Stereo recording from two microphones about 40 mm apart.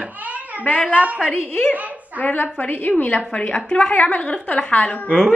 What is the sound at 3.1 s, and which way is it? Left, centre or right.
A woman's voice, left.